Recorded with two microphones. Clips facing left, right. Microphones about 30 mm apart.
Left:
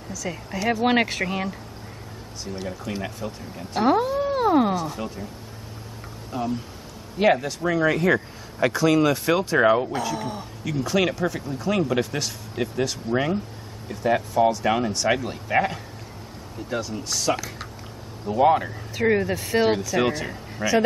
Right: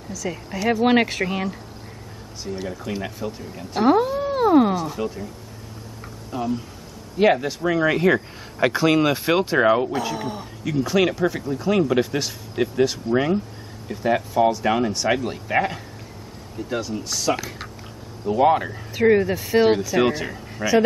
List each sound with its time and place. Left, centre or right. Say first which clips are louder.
0.1 s speech: right 2 dB; centre
6.3 s speech: right 2 dB; centre; by 9.6 s right
10.0 s speech: right 1 dB; centre